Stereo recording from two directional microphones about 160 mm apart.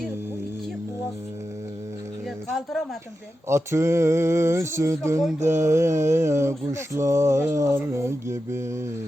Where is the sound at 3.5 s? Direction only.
15° right (ahead or behind).